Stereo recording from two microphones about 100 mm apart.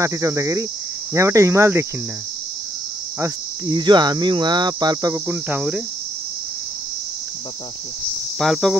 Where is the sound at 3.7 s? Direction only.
45° right (ahead or behind).